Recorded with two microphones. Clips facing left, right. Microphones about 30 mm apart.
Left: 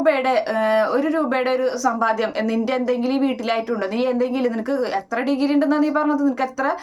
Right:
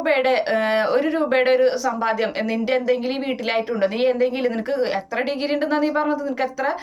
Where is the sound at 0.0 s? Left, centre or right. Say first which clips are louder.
Left 1 dB; right.